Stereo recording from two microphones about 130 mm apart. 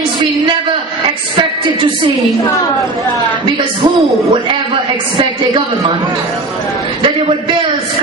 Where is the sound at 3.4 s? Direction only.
35° right (ahead or behind).